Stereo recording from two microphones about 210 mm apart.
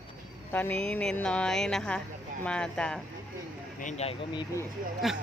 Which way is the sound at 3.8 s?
35° left (ahead or behind).